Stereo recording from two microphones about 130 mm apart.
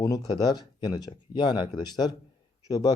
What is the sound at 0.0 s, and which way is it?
A man's voice, 30° left (ahead or behind).